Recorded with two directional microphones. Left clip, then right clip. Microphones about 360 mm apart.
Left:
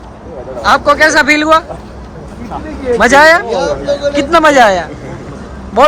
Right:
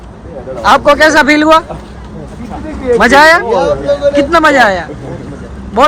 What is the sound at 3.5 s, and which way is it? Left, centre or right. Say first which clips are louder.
Speech: right 3 dB; centre.